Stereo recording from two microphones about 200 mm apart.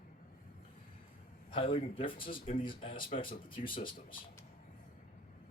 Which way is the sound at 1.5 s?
25° left (ahead or behind).